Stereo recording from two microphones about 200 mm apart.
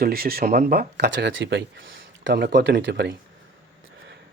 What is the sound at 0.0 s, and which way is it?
Speech, 50° right (ahead or behind).